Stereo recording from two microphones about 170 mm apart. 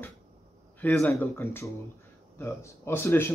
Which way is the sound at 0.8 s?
5° left (ahead or behind).